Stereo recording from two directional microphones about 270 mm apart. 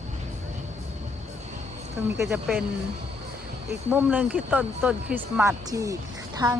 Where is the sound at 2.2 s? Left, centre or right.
Centre.